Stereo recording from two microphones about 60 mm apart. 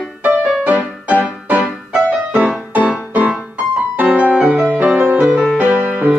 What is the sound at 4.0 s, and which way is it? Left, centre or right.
Music, right.